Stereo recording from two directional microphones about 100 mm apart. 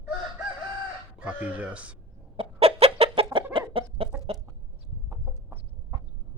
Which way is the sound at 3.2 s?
55° right (ahead or behind).